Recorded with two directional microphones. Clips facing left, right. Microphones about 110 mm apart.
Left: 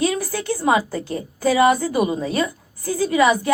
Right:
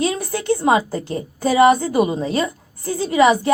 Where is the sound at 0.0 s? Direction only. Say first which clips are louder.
Even; 25° right (ahead or behind).